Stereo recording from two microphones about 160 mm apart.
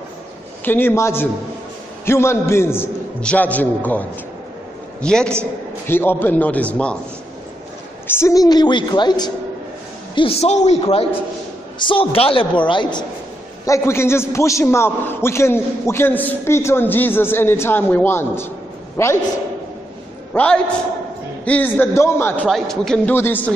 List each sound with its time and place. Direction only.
0.7 s a man's voice: 15° left (ahead or behind)
5.0 s a man's voice: 5° left (ahead or behind)
8.1 s a woman's voice: 20° left (ahead or behind)
10.1 s a man's voice: 40° left (ahead or behind)
13.7 s a man's voice: 20° left (ahead or behind)
20.3 s a man's voice: 5° left (ahead or behind)
22.5 s a man's voice: 5° left (ahead or behind)
23.1 s a man's voice: 15° left (ahead or behind)